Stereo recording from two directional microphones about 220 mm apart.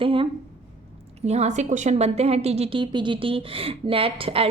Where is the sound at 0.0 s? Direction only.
25° right (ahead or behind).